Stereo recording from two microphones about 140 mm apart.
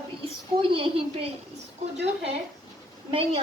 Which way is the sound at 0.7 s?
40° right (ahead or behind).